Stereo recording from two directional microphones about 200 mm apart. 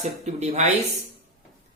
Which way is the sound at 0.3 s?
35° right (ahead or behind).